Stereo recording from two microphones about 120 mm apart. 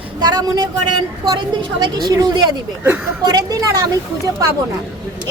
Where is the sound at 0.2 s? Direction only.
35° right (ahead or behind).